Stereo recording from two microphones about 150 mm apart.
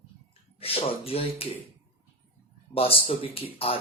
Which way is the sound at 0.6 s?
40° left (ahead or behind).